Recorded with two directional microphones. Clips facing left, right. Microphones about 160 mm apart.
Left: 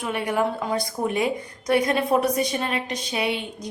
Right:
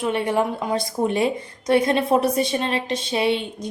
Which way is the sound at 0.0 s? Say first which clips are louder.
Right 3 dB; 25° right (ahead or behind).